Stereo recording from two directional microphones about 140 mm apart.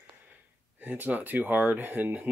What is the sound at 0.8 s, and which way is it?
Speech, 10° right (ahead or behind).